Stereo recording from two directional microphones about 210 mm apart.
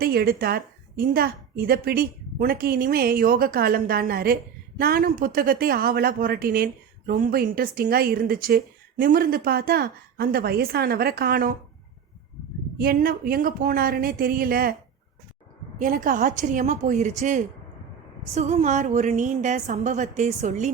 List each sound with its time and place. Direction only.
0.0 s speech: 45° right (ahead or behind)
12.8 s speech: 45° right (ahead or behind)
15.8 s a woman's voice: 40° right (ahead or behind)